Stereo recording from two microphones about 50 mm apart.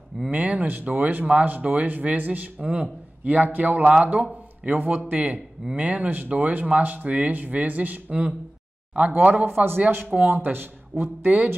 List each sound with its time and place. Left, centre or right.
0.3 s a man's voice: right